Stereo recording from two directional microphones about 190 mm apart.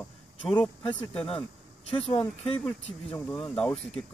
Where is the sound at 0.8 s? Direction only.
25° left (ahead or behind).